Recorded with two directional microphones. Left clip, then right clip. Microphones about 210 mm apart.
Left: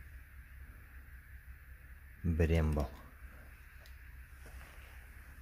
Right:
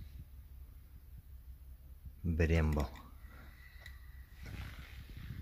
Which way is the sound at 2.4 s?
Centre (ahead or behind).